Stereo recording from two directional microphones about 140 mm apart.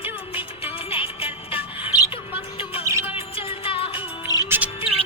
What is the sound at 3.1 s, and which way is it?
Music, 40° left (ahead or behind).